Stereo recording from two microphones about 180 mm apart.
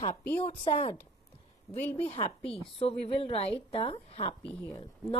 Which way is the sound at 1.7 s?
10° left (ahead or behind).